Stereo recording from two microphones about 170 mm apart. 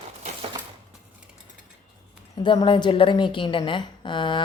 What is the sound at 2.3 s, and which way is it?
A woman's voice, 25° left (ahead or behind).